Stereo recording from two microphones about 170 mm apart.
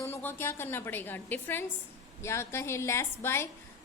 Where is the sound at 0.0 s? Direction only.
15° left (ahead or behind).